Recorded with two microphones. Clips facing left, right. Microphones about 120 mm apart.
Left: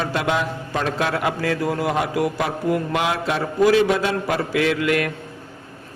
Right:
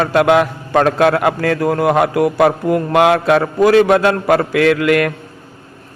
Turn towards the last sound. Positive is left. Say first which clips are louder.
# right 7 dB
turn(degrees=-65)  # may be behind; listen again after turning